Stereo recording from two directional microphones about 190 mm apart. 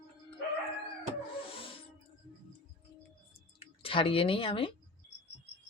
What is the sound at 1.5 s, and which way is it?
Wild animals, 30° left (ahead or behind).